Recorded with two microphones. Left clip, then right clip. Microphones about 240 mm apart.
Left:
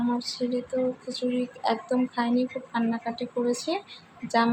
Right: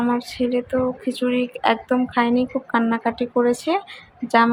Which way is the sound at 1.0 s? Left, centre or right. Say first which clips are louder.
Right 7 dB; right.